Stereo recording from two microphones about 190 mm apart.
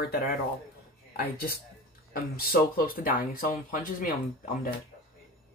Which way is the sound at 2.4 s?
50° left (ahead or behind).